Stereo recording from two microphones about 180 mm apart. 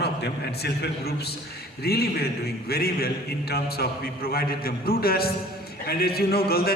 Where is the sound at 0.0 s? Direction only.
65° left (ahead or behind).